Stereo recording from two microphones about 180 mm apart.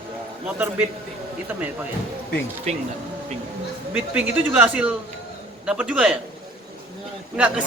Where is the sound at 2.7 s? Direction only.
40° right (ahead or behind).